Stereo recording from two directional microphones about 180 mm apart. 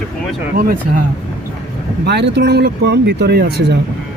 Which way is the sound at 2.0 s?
70° right (ahead or behind).